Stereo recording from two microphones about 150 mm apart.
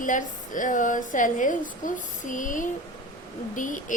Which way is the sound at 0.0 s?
60° left (ahead or behind).